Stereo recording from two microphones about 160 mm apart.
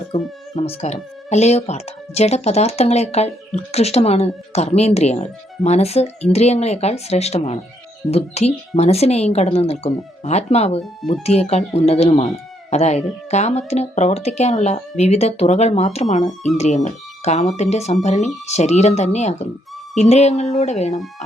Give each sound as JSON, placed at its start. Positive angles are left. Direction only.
{"t": 0.1, "sound": "speech", "side_deg": 40}